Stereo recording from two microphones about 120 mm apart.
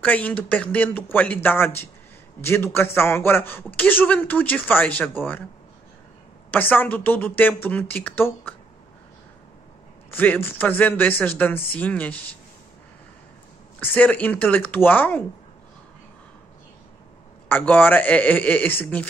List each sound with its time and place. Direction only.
0.0 s a man's voice: 15° left (ahead or behind)
6.5 s a man's voice: 15° left (ahead or behind)
10.1 s a man's voice: 15° left (ahead or behind)
13.7 s a man's voice: 15° left (ahead or behind)
17.5 s a man's voice: 15° left (ahead or behind)